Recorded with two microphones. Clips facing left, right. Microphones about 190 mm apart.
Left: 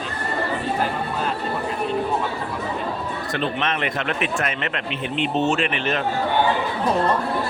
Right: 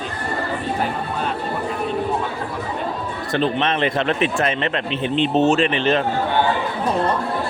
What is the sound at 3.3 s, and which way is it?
Speech, 30° right (ahead or behind).